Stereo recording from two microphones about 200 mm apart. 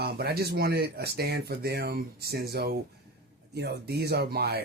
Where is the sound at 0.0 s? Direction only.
50° right (ahead or behind).